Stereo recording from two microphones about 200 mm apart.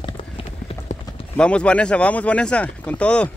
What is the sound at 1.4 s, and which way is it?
Speech, 5° left (ahead or behind).